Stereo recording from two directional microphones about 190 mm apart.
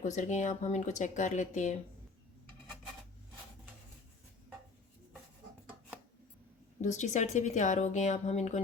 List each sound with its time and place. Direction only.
0.0 s speech: 40° left (ahead or behind)
6.8 s speech: 40° left (ahead or behind)